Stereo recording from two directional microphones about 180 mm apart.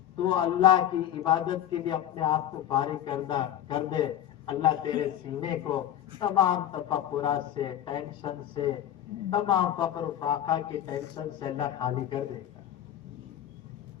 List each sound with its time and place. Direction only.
0.2 s a man's voice: 25° left (ahead or behind)